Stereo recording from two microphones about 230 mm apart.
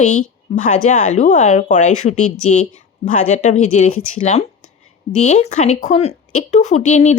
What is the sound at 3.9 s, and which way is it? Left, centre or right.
Speech, left.